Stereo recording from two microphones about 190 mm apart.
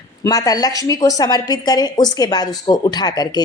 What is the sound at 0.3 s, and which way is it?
A woman's voice, 20° left (ahead or behind).